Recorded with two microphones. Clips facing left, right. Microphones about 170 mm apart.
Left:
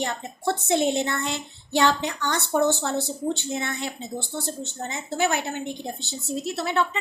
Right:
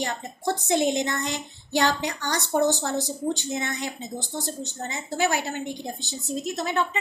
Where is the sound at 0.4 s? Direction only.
15° right (ahead or behind).